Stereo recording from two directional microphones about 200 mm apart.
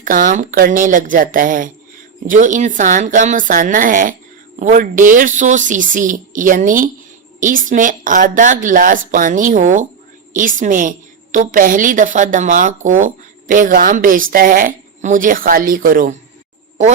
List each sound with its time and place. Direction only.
0.0 s a woman's voice: 40° right (ahead or behind)